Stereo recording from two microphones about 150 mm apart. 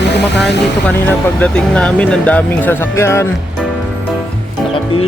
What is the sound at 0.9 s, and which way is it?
Speech, 10° left (ahead or behind).